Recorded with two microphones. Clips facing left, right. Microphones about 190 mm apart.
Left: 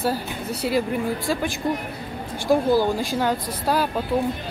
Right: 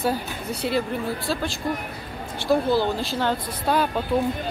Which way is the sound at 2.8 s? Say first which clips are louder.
Left 2 dB; 10° left (ahead or behind).